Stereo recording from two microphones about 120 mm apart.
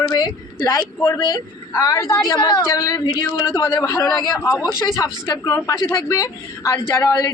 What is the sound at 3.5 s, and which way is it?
A woman's voice, 20° left (ahead or behind).